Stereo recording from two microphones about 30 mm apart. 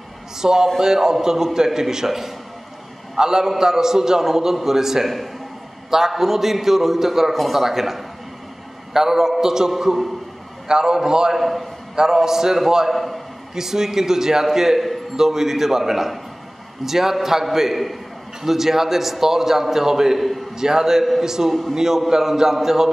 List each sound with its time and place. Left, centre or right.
0.4 s a man's voice: right
7.3 s a man's voice: centre
7.6 s a man's voice: centre
10.7 s a man's voice: right
11.3 s a man's voice: centre
11.9 s a man's voice: centre
12.9 s a man's voice: centre
13.6 s a man's voice: centre
20.2 s a man's voice: centre
20.5 s a man's voice: centre